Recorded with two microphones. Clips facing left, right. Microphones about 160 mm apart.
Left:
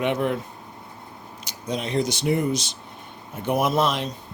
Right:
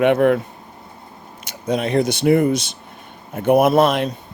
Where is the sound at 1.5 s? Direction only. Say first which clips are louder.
Right 8 dB; 55° right (ahead or behind).